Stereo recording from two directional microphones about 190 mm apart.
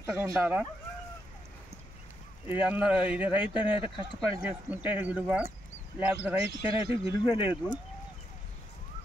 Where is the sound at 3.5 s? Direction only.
25° left (ahead or behind).